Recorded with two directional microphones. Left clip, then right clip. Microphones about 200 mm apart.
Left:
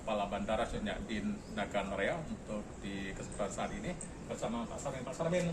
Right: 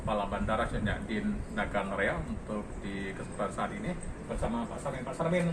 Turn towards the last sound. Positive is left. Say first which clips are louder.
# right 4 dB
turn(degrees=10)  # may be behind; listen again after turning